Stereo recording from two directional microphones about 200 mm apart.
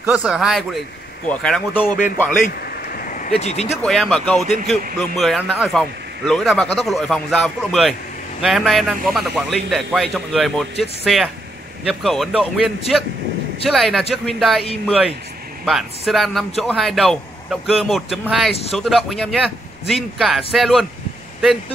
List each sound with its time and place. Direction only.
0.0 s a man's voice: 5° right (ahead or behind)
2.3 s a sound: 45° left (ahead or behind)
3.8 s a man's voice: centre (ahead or behind)
18.5 s speech: 30° left (ahead or behind)
18.8 s a man's voice: centre (ahead or behind)